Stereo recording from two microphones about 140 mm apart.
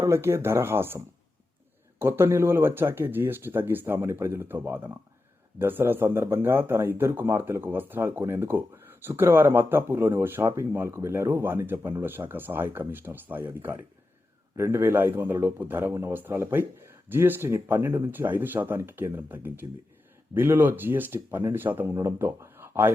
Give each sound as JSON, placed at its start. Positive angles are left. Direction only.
{"t": 0.0, "sound": "a man's voice", "side_deg": -20}